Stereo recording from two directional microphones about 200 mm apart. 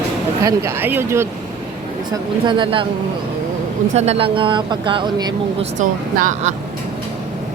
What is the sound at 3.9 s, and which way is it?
Speech, 30° right (ahead or behind).